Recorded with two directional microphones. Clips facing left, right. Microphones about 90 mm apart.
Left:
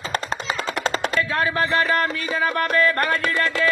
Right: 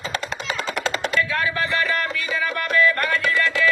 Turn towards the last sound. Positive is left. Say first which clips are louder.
# right 1 dB
turn(degrees=40)  # may be behind; listen again after turning